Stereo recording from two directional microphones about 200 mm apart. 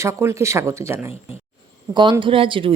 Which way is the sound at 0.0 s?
15° right (ahead or behind).